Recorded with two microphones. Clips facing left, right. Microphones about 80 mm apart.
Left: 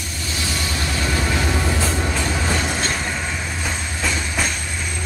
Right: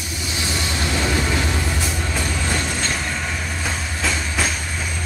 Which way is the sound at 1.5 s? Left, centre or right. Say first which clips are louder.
Left 3 dB; centre.